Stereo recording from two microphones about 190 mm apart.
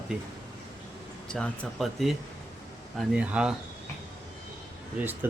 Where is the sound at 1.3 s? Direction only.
Centre (ahead or behind).